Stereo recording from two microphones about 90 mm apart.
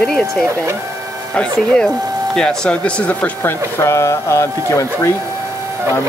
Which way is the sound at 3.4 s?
25° left (ahead or behind).